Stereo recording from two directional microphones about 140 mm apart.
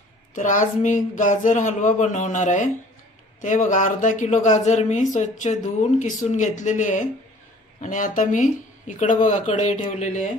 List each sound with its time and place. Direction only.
0.3 s speech: 65° left (ahead or behind)